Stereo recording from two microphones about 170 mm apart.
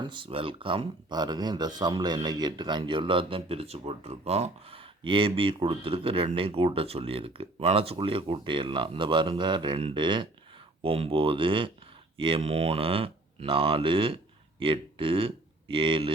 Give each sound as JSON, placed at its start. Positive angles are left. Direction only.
{"t": 0.0, "sound": "speech", "side_deg": -30}